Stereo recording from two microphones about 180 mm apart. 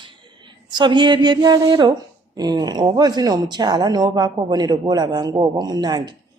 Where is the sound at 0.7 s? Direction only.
25° right (ahead or behind).